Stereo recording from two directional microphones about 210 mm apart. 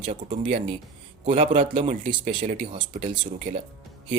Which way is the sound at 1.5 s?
25° right (ahead or behind).